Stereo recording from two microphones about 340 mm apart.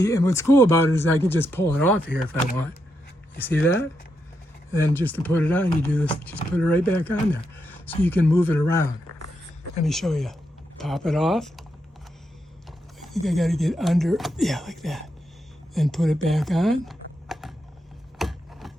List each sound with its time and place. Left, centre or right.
0.0 s speech: centre
4.7 s speech: centre
7.6 s a sound: centre
8.0 s speech: centre
13.2 s speech: centre
18.2 s a sound: centre